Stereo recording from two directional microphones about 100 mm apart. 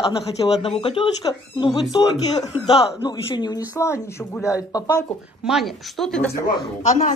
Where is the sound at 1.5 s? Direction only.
50° left (ahead or behind).